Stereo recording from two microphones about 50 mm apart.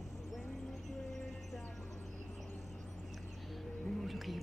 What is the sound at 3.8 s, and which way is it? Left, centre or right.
Music, centre.